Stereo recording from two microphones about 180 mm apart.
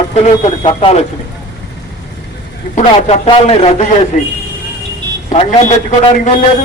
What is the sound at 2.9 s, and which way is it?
A man's voice, 30° left (ahead or behind).